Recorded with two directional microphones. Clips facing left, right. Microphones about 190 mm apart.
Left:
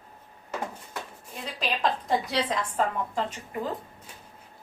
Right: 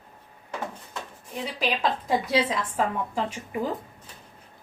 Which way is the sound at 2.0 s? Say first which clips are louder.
Right 3 dB; 5° right (ahead or behind).